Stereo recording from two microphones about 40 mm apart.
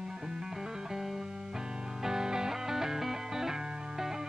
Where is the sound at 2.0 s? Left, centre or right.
Centre.